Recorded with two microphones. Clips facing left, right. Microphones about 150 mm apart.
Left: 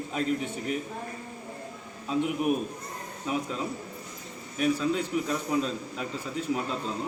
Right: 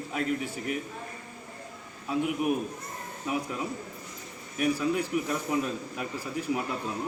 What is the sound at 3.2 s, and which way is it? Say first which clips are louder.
A man's voice: left 1 dB; 15° right (ahead or behind).